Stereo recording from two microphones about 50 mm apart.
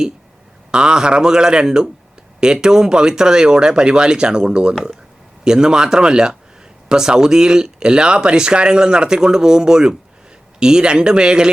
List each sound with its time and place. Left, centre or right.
0.7 s speech: centre